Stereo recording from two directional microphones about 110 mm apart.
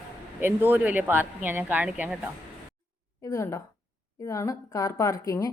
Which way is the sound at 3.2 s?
30° left (ahead or behind).